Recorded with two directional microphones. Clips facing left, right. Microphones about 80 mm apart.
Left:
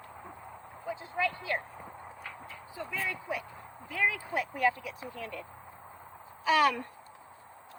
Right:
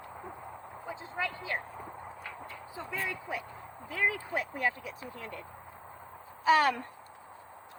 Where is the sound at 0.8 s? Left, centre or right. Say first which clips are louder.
Left 4 dB; right.